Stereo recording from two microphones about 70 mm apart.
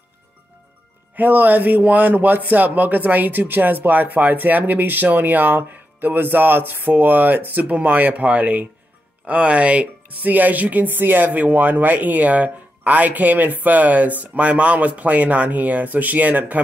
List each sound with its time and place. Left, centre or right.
1.1 s speech: right